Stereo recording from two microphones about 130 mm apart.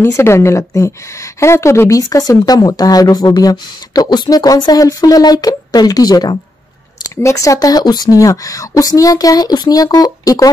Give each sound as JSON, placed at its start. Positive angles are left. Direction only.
{"t": 0.0, "sound": "a woman's voice", "side_deg": 20}